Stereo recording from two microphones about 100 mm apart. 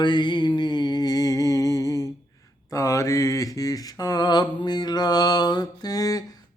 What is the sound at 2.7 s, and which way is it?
Mantra, 35° left (ahead or behind).